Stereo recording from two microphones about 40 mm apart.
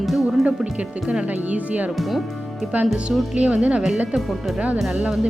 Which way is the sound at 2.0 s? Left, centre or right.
Centre.